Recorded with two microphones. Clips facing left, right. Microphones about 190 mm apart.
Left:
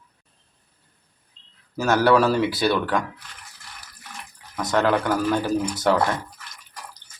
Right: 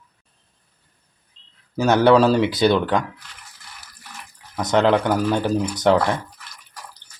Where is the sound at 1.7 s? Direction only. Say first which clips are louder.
Right 3 dB; 20° right (ahead or behind).